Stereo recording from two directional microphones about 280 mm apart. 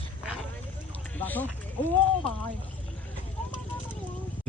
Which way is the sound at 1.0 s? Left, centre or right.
Centre.